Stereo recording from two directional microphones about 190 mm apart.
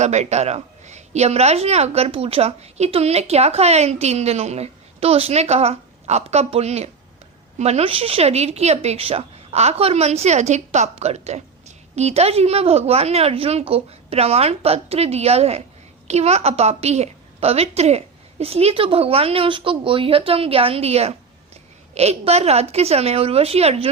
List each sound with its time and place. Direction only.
0.0 s a woman's voice: 35° right (ahead or behind)